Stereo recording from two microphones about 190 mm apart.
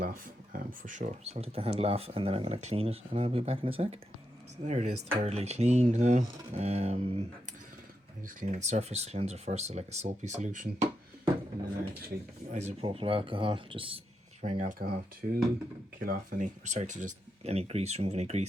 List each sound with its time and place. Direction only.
0.0 s speech: 45° right (ahead or behind)
8.4 s speech: 40° right (ahead or behind)
12.0 s speech: 40° right (ahead or behind)
14.5 s speech: 40° right (ahead or behind)